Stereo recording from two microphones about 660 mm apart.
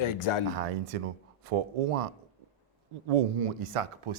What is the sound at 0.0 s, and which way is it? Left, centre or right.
Speech, left.